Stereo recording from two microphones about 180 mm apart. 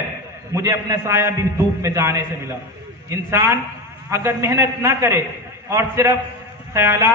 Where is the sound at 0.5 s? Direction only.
20° right (ahead or behind).